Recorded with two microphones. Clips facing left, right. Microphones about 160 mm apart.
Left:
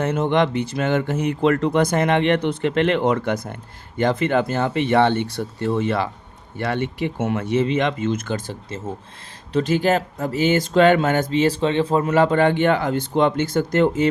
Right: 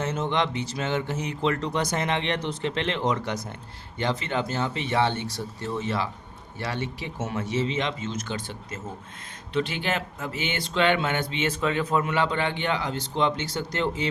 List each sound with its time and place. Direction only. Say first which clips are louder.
0.0 s speech: left 7 dB; 55° left (ahead or behind)